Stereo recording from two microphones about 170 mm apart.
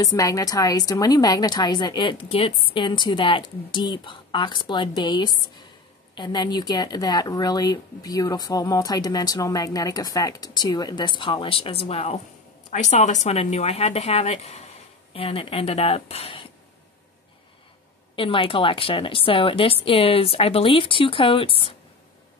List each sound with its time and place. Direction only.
0.0 s a woman's voice: 20° left (ahead or behind)
18.1 s a woman's voice: 30° left (ahead or behind)